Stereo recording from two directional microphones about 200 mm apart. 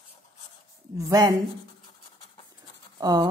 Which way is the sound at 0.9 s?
15° right (ahead or behind).